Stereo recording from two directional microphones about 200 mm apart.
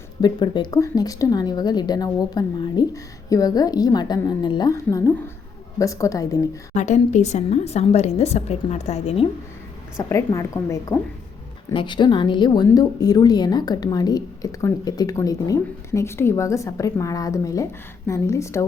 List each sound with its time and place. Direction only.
0.2 s speech: 20° left (ahead or behind)
6.7 s a woman's voice: 35° left (ahead or behind)
10.0 s speech: 15° left (ahead or behind)